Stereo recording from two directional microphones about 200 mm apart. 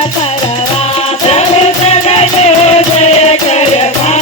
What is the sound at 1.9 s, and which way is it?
Music, 30° left (ahead or behind).